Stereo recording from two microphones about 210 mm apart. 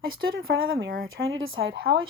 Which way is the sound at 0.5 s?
65° right (ahead or behind).